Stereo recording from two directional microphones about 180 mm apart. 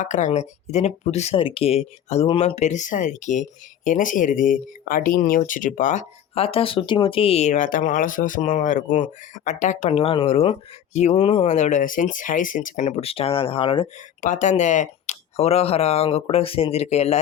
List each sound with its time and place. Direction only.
0.0 s speech: 45° left (ahead or behind)
11.4 s speech: 40° left (ahead or behind)
14.2 s speech: 45° left (ahead or behind)